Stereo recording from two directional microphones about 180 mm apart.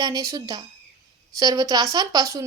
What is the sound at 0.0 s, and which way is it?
Speech, 20° right (ahead or behind).